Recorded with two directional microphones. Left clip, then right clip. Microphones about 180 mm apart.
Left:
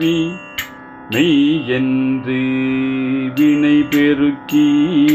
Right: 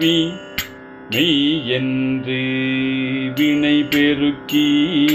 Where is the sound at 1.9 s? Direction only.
15° left (ahead or behind).